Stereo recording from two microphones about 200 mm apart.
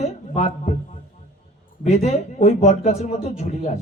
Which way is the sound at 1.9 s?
35° left (ahead or behind).